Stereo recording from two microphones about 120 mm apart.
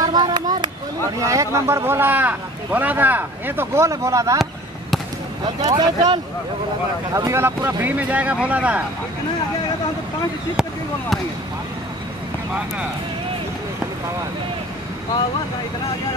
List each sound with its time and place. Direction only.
0.0 s a sound: 35° right (ahead or behind)
1.2 s speech: 25° right (ahead or behind)
5.4 s speech: 35° right (ahead or behind)
7.2 s speech: 25° right (ahead or behind)
10.5 s speech: 5° right (ahead or behind)